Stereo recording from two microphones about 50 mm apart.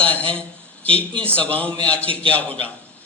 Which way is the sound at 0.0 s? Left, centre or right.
Left.